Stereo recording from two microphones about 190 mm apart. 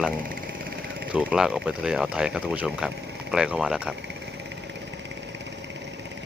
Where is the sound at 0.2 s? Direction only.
50° right (ahead or behind).